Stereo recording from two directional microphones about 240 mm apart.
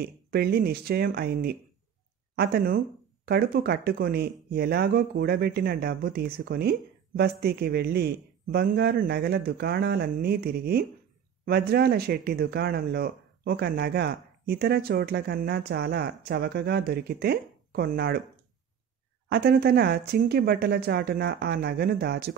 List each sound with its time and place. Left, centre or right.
0.0 s speech: right
19.2 s speech: right